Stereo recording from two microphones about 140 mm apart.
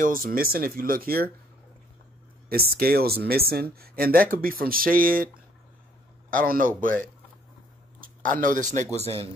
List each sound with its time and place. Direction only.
0.0 s speech: 80° right
2.5 s speech: 90° right
6.3 s speech: 85° right
8.0 s speech: 80° right
8.9 s speech: 45° right (ahead or behind)